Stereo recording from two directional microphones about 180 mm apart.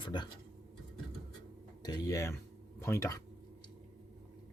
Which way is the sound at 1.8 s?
20° left (ahead or behind).